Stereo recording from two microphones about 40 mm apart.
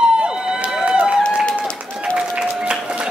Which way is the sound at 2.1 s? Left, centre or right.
Right.